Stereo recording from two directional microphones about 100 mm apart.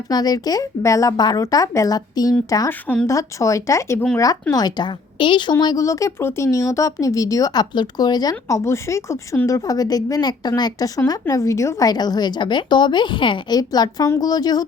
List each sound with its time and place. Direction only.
0.1 s speech: 40° left (ahead or behind)
2.6 s a woman's voice: 15° left (ahead or behind)
3.1 s speech: 30° left (ahead or behind)
4.5 s a woman's voice: 45° left (ahead or behind)
5.5 s a woman's voice: 40° left (ahead or behind); by 13.6 s 55° left (ahead or behind)
13.6 s speech: 40° left (ahead or behind)